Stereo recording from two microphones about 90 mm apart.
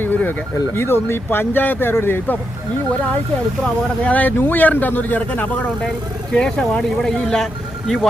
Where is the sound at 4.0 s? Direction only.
15° left (ahead or behind).